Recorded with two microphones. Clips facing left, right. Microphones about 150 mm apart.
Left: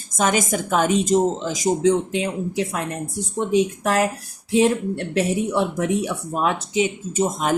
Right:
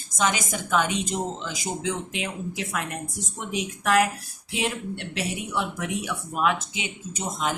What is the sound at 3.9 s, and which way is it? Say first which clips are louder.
Speech: left 2 dB; 35° left (ahead or behind).